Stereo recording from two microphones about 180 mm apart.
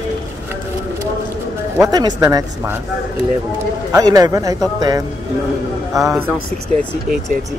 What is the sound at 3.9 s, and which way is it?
Speech, 20° right (ahead or behind).